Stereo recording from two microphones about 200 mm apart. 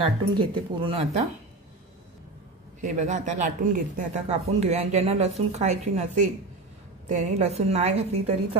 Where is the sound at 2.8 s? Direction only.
35° right (ahead or behind).